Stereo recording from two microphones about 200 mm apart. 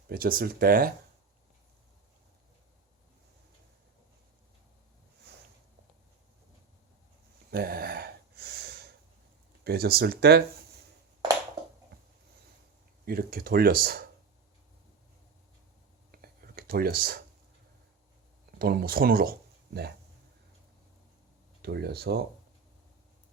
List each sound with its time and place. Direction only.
0.1 s speech: 45° right (ahead or behind)
7.5 s a sound: 50° right (ahead or behind)
9.6 s speech: 50° right (ahead or behind)
13.1 s speech: 50° right (ahead or behind)
16.1 s whispering: 50° right (ahead or behind)
18.6 s speech: 50° right (ahead or behind)
21.6 s speech: 55° right (ahead or behind)